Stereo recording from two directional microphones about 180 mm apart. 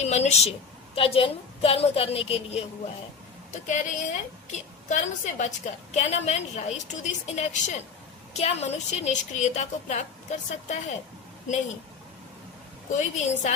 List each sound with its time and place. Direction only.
0.0 s a woman's voice: 40° left (ahead or behind)
13.0 s a woman's voice: 40° left (ahead or behind)